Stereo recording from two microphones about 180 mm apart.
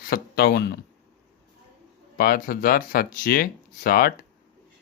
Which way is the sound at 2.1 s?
55° left (ahead or behind).